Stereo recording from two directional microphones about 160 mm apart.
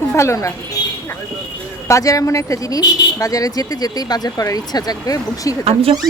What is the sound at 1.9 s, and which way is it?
Speech, 20° left (ahead or behind).